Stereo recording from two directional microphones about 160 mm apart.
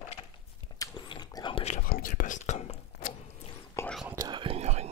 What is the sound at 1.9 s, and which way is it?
Whispering, 60° left (ahead or behind).